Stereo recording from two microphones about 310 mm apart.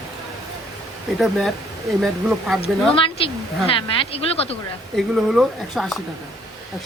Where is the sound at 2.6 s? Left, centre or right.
Centre.